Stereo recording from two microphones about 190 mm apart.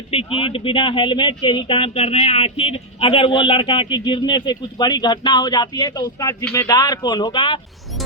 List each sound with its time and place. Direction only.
0.1 s speech: 30° left (ahead or behind)